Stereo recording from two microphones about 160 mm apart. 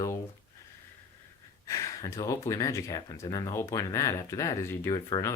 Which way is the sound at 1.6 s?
20° left (ahead or behind).